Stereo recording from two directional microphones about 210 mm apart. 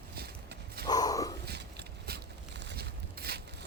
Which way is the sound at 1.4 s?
50° right (ahead or behind).